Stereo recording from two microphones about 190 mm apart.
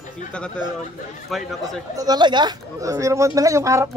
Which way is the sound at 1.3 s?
Centre (ahead or behind).